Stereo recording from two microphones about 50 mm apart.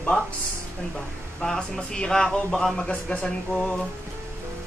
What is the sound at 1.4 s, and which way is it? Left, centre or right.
A man's voice, centre.